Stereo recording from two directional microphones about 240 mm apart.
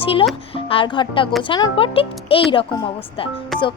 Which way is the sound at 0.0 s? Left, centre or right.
Left.